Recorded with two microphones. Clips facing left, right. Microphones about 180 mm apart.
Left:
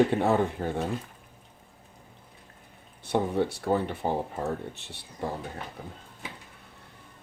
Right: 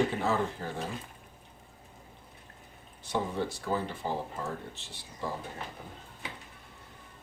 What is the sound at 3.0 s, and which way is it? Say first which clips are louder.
Speech: left 6 dB; 60° left (ahead or behind).